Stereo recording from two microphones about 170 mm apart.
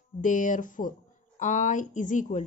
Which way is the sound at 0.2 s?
50° left (ahead or behind).